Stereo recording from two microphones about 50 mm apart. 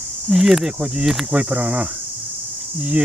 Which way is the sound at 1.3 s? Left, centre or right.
Right.